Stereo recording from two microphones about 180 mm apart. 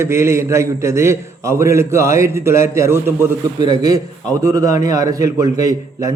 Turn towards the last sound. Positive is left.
turn(degrees=-20)  # may be behind; listen again after turning